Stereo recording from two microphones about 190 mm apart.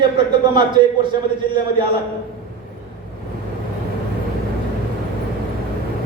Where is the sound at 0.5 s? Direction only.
25° right (ahead or behind).